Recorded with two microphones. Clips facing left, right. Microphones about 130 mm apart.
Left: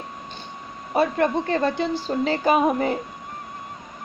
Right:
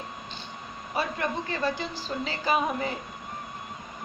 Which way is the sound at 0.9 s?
55° left (ahead or behind).